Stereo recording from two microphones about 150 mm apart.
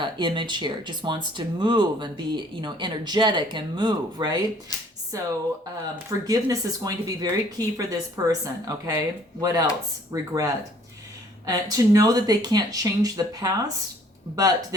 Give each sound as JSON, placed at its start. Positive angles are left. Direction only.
{"t": 0.0, "sound": "speech", "side_deg": -30}